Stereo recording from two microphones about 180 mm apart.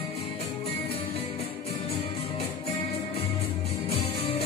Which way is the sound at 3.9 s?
30° left (ahead or behind).